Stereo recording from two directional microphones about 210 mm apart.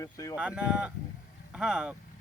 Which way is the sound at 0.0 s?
15° left (ahead or behind).